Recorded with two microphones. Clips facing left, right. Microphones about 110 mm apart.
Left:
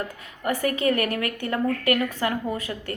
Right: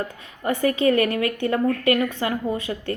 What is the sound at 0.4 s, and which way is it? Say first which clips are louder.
A woman's voice: right 3 dB; 25° right (ahead or behind).